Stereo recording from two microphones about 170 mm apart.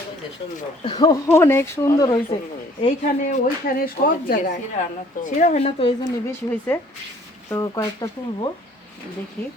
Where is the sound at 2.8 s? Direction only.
50° left (ahead or behind).